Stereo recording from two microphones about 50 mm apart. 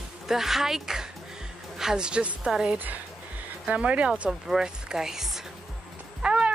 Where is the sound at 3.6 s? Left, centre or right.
Right.